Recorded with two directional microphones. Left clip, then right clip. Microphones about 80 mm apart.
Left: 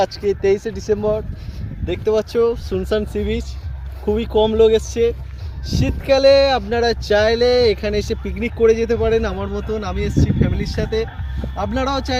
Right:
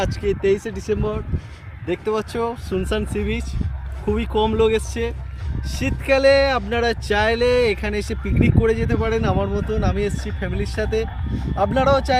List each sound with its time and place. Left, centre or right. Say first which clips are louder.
0.0 s speech: left 4 dB; right